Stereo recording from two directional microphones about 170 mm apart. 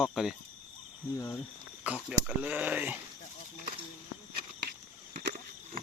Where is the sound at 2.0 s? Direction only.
5° right (ahead or behind).